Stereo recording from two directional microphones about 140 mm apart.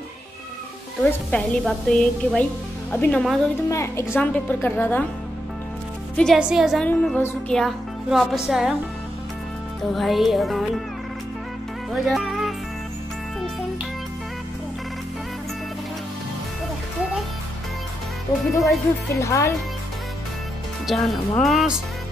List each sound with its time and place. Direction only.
1.3 s a woman's voice: centre (ahead or behind)
3.7 s a woman's voice: 20° left (ahead or behind)
6.1 s a woman's voice: centre (ahead or behind)
6.8 s a woman's voice: 10° left (ahead or behind)
7.5 s a woman's voice: centre (ahead or behind)
9.9 s a woman's voice: centre (ahead or behind)
11.9 s speech: centre (ahead or behind)
18.3 s speech: 25° left (ahead or behind)
20.8 s a woman's voice: centre (ahead or behind)